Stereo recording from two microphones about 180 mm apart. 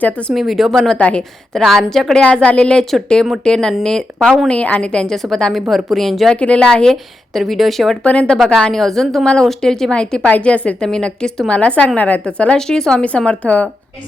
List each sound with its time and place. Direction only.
0.0 s a woman's voice: 5° left (ahead or behind)